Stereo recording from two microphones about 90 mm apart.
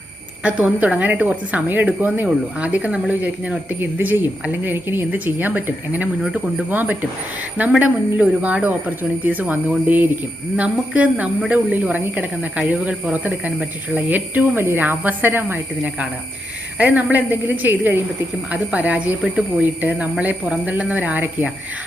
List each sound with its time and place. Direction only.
0.4 s speech: 15° right (ahead or behind)